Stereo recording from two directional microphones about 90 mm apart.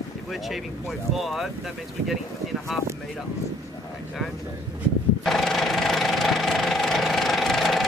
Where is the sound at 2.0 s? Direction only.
Centre (ahead or behind).